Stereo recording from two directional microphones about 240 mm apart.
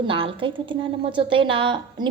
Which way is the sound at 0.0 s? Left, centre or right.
Right.